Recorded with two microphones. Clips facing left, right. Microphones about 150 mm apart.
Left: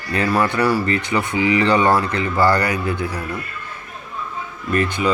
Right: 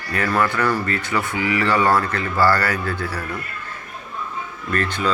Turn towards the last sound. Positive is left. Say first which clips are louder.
# left 3 dB
turn(degrees=10)  # may be behind; listen again after turning